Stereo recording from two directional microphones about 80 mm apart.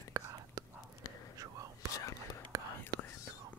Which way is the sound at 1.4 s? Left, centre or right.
Right.